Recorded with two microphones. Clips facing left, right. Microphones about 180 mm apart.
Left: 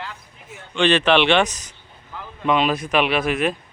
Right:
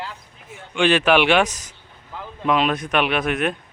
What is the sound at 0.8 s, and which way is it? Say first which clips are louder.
Speech: even; 10° right (ahead or behind).